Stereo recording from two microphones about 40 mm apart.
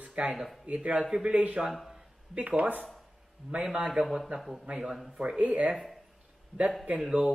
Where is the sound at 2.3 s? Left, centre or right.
Right.